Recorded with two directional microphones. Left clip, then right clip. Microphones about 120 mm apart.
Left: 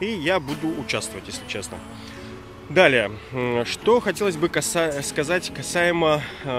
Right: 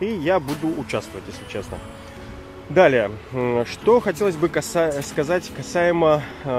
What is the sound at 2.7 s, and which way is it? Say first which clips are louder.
Speech: right 1 dB; 20° left (ahead or behind).